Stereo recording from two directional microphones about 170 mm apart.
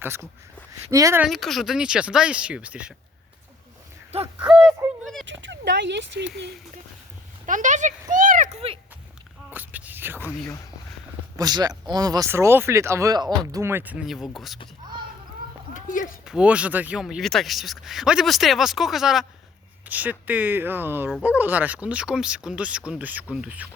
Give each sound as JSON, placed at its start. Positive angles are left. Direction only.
{"t": 0.0, "sound": "speech", "side_deg": -15}
{"t": 1.2, "sound": "speech", "side_deg": 0}
{"t": 4.1, "sound": "speech", "side_deg": -35}
{"t": 4.8, "sound": "a sound", "side_deg": -10}
{"t": 5.2, "sound": "speech", "side_deg": -90}
{"t": 7.4, "sound": "speech", "side_deg": -50}
{"t": 9.5, "sound": "a sound", "side_deg": -10}
{"t": 11.3, "sound": "speech", "side_deg": -25}
{"t": 15.7, "sound": "a sound", "side_deg": 50}
{"t": 16.2, "sound": "speech", "side_deg": -5}
{"t": 21.1, "sound": "speech", "side_deg": 0}
{"t": 21.3, "sound": "speech", "side_deg": -10}